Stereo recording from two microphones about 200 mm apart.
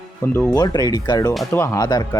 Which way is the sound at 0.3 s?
15° left (ahead or behind).